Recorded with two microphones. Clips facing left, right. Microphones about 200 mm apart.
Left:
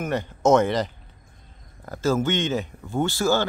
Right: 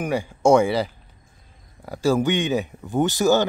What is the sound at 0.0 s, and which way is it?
Speech, 10° right (ahead or behind).